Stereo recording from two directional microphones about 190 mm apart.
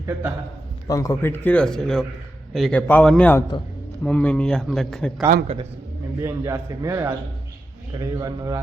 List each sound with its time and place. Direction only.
0.0 s a man's voice: 10° right (ahead or behind)
0.9 s a man's voice: 15° left (ahead or behind)
6.1 s a man's voice: 15° right (ahead or behind)